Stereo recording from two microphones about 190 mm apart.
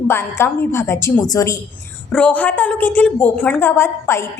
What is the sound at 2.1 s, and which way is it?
A woman's voice, 5° left (ahead or behind).